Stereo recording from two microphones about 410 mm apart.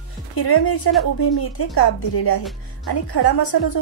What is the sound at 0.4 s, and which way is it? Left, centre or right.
A woman's voice, left.